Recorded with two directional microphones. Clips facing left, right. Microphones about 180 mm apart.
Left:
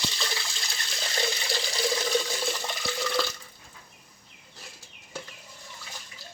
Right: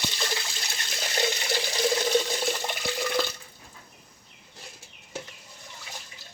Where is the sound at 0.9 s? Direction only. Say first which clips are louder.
Right 3 dB; 20° right (ahead or behind).